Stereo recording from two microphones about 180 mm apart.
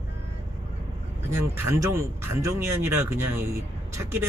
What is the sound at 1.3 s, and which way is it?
Speech, 15° right (ahead or behind).